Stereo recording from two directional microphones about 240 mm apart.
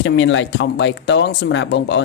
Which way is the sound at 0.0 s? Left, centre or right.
Left.